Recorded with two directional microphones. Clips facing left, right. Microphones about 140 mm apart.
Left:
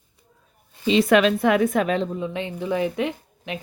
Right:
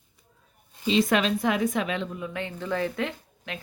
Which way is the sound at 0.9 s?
65° left (ahead or behind).